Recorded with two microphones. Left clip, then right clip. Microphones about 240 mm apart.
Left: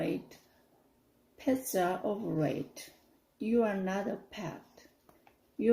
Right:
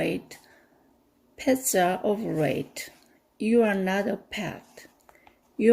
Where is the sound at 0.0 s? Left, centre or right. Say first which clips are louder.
Right 7 dB; right.